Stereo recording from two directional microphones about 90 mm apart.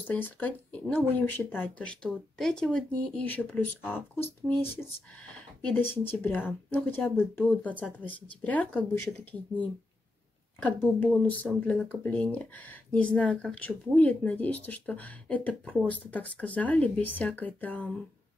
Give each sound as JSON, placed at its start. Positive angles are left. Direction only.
{"t": 0.0, "sound": "speech", "side_deg": 20}
{"t": 1.9, "sound": "speech", "side_deg": 5}
{"t": 10.6, "sound": "speech", "side_deg": 20}